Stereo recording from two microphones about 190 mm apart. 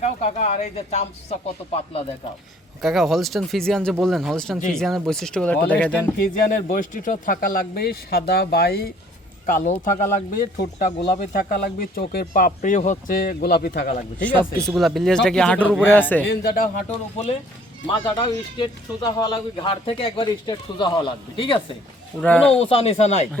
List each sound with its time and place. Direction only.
0.0 s speech: 35° left (ahead or behind)
2.8 s speech: centre (ahead or behind)
6.1 s speech: 50° left (ahead or behind)
9.5 s speech: 45° left (ahead or behind)
11.2 s speech: 55° left (ahead or behind)
14.2 s speech: 5° left (ahead or behind)
16.2 s speech: 60° left (ahead or behind)
17.9 s speech: 25° left (ahead or behind)
22.2 s speech: 5° left (ahead or behind)
22.7 s speech: 35° left (ahead or behind)